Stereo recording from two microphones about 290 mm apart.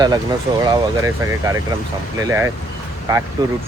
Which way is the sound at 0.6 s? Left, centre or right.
Centre.